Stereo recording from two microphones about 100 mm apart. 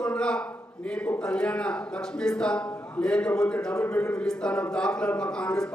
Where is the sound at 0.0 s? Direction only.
10° left (ahead or behind).